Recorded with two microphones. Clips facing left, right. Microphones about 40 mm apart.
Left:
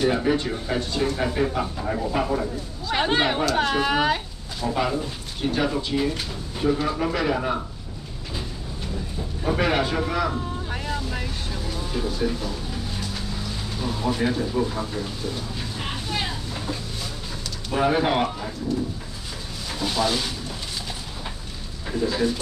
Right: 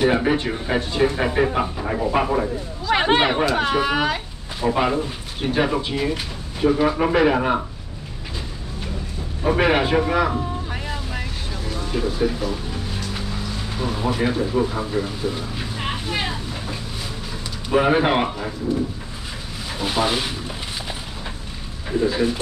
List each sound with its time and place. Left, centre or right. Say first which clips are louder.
0.0 s speech: right 3 dB; right
3.5 s speech: right 2 dB; centre
4.6 s speech: right 4 dB; right
9.4 s speech: right 4 dB; right
10.3 s vehicle: right 3 dB; centre
12.1 s speech: right 4 dB; centre
13.7 s speech: right 2 dB; right
19.8 s speech: right 2 dB; right
21.9 s speech: right 3 dB; right